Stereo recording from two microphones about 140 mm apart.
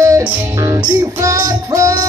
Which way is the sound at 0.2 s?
20° right (ahead or behind).